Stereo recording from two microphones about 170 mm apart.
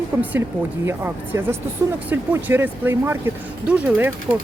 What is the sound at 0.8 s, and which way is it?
Speech, 15° right (ahead or behind).